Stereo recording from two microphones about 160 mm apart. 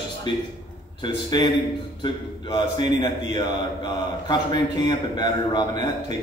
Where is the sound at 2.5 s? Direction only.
25° left (ahead or behind).